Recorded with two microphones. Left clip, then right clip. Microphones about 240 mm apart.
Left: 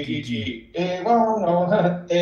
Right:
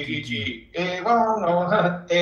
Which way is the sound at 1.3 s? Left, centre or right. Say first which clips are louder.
Left 1 dB; right.